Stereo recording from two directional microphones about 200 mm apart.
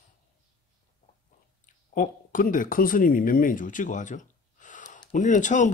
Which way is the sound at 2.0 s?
40° left (ahead or behind).